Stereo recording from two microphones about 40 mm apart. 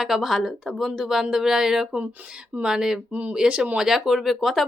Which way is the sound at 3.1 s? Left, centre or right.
Right.